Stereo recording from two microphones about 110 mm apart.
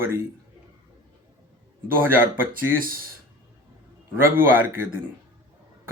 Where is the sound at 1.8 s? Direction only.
20° right (ahead or behind).